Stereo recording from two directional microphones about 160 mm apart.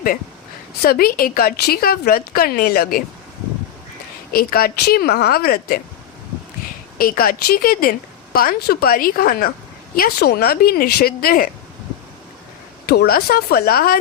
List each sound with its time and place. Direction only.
0.8 s a woman's voice: 70° left (ahead or behind)
4.3 s a woman's voice: 70° left (ahead or behind)
7.0 s a woman's voice: 65° left (ahead or behind)
12.8 s a woman's voice: 75° left (ahead or behind)